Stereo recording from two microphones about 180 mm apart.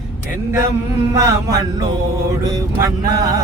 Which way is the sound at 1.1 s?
15° right (ahead or behind).